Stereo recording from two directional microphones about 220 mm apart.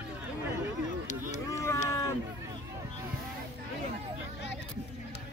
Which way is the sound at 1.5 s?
15° left (ahead or behind).